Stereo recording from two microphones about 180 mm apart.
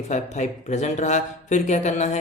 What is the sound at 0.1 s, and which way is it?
Speech, 40° left (ahead or behind).